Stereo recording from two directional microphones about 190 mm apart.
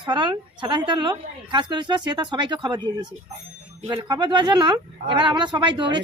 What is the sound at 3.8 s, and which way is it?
A woman's voice, 20° right (ahead or behind).